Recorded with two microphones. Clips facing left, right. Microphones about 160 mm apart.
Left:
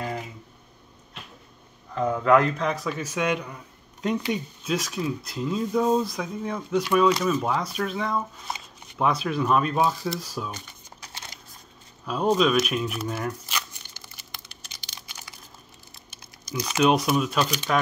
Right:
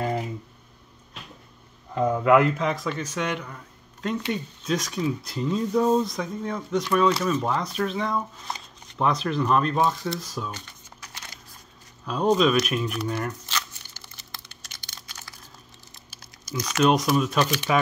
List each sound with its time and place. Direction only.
2.0 s speech: 5° right (ahead or behind); by 10.6 s 10° left (ahead or behind)
11.0 s a sound: 30° left (ahead or behind)
12.1 s speech: 5° left (ahead or behind)
14.9 s computer keyboard: 15° left (ahead or behind)
15.9 s crumpling: 15° left (ahead or behind)
17.7 s speech: 5° right (ahead or behind)